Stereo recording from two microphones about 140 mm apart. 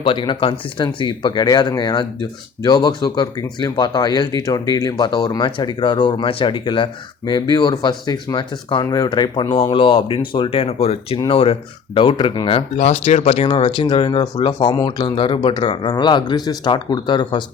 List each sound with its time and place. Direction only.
0.0 s speech: 35° left (ahead or behind)